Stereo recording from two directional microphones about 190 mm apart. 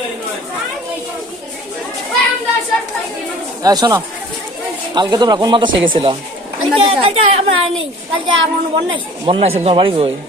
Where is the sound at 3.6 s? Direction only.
20° right (ahead or behind).